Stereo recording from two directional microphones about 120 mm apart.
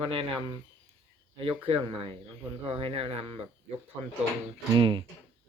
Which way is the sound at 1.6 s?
50° right (ahead or behind).